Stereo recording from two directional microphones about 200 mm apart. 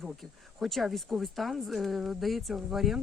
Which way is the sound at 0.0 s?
Centre (ahead or behind).